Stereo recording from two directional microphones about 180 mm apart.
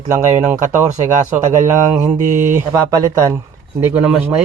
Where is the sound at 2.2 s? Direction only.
45° right (ahead or behind).